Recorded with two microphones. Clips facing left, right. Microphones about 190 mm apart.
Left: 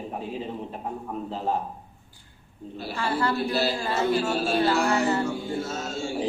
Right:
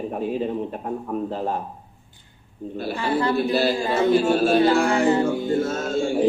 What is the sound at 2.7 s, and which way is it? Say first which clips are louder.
Speech: right 7 dB; 55° right (ahead or behind).